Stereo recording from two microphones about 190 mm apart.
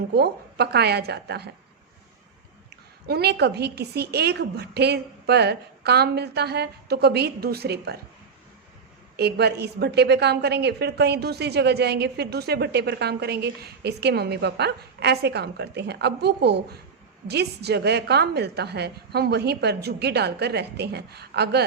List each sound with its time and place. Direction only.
0.1 s a woman's voice: 60° right (ahead or behind)
3.1 s a woman's voice: 55° right (ahead or behind)
9.1 s a woman's voice: 60° right (ahead or behind)